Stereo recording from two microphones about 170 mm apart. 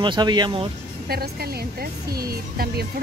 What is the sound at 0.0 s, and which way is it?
Speech, 25° right (ahead or behind).